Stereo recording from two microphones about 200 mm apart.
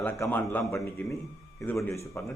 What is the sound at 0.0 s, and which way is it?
Speech, 10° left (ahead or behind).